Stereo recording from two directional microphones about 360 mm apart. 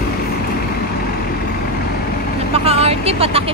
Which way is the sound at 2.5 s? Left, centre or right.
Centre.